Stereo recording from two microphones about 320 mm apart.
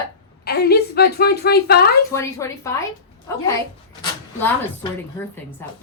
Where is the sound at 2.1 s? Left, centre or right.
Centre.